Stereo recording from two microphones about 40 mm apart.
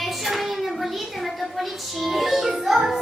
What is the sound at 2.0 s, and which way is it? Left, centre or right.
Music, centre.